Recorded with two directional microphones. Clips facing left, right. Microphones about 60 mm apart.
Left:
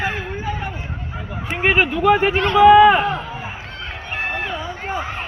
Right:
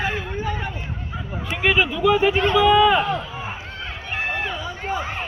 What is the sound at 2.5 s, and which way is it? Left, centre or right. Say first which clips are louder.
Speech: left 8 dB; left.